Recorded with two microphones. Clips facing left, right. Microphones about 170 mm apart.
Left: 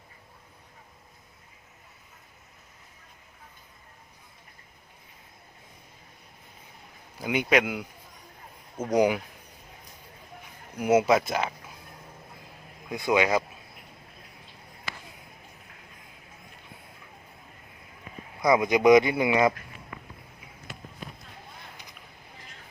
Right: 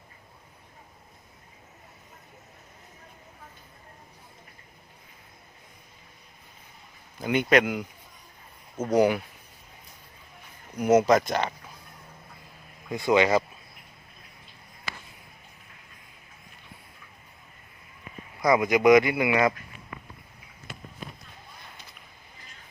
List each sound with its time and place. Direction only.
7.2 s speech: 5° left (ahead or behind)
10.8 s speech: 10° left (ahead or behind)
12.9 s speech: 5° left (ahead or behind)
18.4 s speech: 20° left (ahead or behind)